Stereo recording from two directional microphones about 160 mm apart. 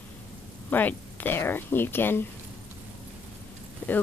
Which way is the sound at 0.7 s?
10° left (ahead or behind).